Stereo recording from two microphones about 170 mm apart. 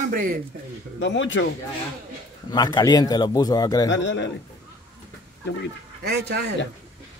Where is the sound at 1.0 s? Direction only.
90° left.